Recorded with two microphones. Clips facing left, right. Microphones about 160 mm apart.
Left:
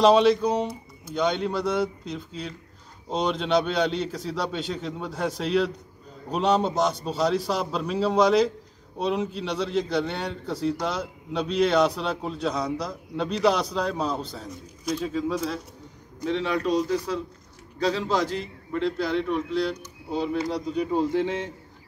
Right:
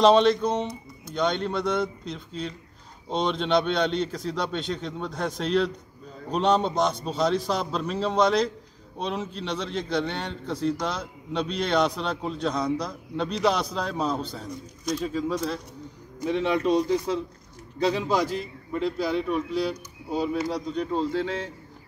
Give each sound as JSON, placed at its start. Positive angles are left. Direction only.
{"t": 0.0, "sound": "a man's voice", "side_deg": 5}
{"t": 16.3, "sound": "speech", "side_deg": -20}
{"t": 20.4, "sound": "speech", "side_deg": 5}